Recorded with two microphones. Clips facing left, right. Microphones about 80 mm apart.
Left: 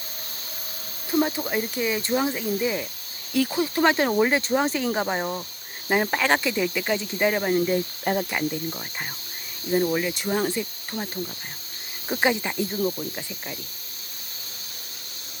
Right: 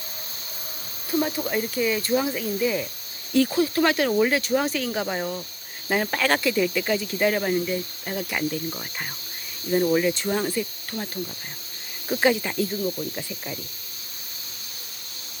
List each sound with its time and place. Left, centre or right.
1.1 s cricket: centre
1.5 s speech: centre
3.3 s speech: centre
3.6 s speech: left
7.6 s speech: left
8.3 s speech: centre